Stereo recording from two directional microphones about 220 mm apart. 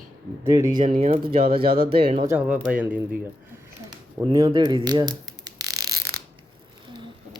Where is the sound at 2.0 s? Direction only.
25° right (ahead or behind).